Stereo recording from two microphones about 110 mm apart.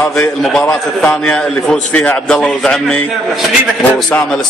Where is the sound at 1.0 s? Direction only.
10° left (ahead or behind).